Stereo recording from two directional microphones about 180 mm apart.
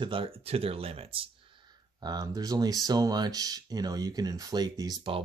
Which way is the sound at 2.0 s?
20° right (ahead or behind).